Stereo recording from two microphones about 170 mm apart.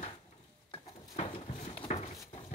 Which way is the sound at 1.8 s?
35° left (ahead or behind).